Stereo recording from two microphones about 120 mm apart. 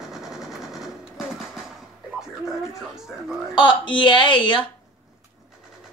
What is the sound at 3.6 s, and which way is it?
Speech, 45° left (ahead or behind).